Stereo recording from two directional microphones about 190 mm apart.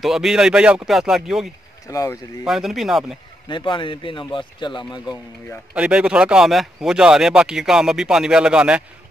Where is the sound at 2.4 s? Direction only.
Centre (ahead or behind).